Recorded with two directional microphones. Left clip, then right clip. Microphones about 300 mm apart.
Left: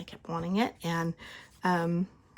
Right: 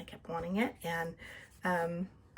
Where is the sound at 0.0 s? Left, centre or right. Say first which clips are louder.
Left 3 dB; centre.